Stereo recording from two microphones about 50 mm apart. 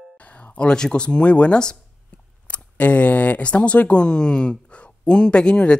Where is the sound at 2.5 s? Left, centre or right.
Left.